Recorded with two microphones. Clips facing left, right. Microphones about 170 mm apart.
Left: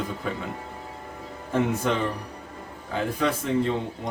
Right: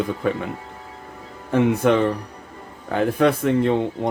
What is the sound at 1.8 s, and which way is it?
Speech, 60° right (ahead or behind).